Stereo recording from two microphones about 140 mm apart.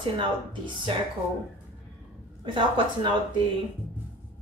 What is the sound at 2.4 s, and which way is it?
Speech, 35° right (ahead or behind).